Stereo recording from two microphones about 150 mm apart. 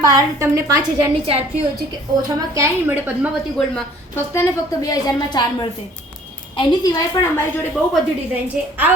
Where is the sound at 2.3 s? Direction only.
20° right (ahead or behind).